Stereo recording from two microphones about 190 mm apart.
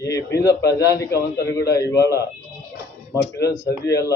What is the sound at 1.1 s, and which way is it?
Speech, 60° left (ahead or behind).